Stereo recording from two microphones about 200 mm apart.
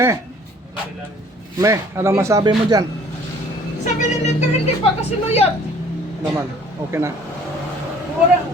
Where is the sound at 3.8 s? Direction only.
40° left (ahead or behind).